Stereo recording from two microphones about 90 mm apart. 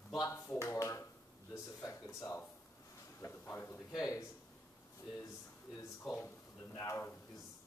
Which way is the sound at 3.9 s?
40° left (ahead or behind).